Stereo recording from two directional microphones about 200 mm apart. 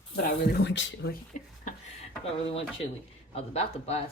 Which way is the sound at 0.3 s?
60° left (ahead or behind).